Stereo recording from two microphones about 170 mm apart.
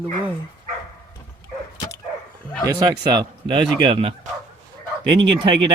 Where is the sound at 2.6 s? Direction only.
25° right (ahead or behind).